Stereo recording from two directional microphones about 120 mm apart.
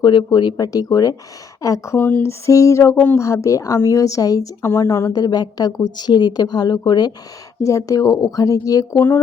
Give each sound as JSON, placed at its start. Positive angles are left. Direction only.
{"t": 0.0, "sound": "a woman's voice", "side_deg": 40}
{"t": 2.5, "sound": "a woman's voice", "side_deg": 25}
{"t": 5.1, "sound": "a woman's voice", "side_deg": 35}